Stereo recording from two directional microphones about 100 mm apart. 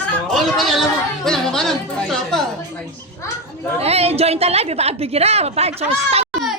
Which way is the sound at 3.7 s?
90° right.